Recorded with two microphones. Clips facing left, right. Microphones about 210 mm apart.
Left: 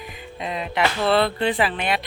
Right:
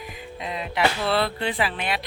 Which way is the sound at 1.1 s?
5° right (ahead or behind).